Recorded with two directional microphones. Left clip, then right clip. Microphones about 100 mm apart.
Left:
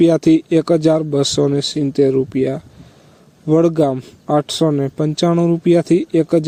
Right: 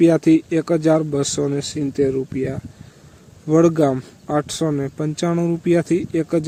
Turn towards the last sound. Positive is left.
turn(degrees=40)  # may be behind; listen again after turning